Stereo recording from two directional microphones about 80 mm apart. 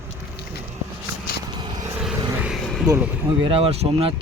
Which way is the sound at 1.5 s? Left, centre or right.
Right.